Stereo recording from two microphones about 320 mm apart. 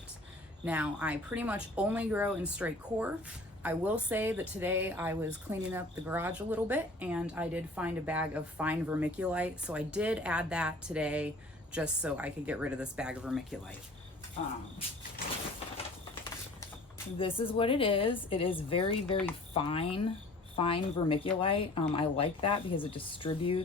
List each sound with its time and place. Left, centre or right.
0.6 s speech: centre
17.2 s speech: centre